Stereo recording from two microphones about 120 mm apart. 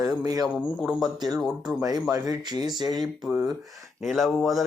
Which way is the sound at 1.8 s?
30° right (ahead or behind).